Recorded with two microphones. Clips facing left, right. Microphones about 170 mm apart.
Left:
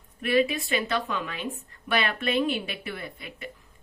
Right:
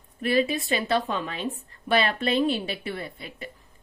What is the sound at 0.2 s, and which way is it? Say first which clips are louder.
A woman's voice: even; 35° right (ahead or behind).